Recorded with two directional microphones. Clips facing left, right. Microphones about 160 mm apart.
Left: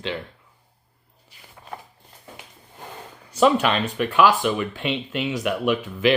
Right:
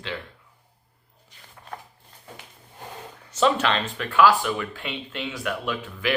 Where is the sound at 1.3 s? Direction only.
10° left (ahead or behind).